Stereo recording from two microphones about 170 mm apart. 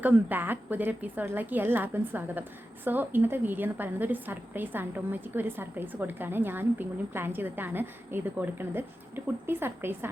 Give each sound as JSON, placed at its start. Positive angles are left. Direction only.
{"t": 0.0, "sound": "a woman's voice", "side_deg": -10}